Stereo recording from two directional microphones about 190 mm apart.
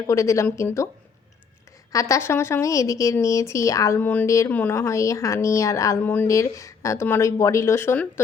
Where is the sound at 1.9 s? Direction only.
15° left (ahead or behind).